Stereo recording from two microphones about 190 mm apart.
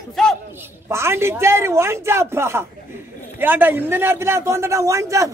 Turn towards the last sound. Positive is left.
turn(degrees=-15)  # may be behind; listen again after turning